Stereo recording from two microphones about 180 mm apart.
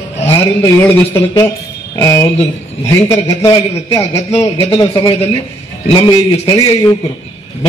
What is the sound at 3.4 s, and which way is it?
A man's voice, 15° left (ahead or behind).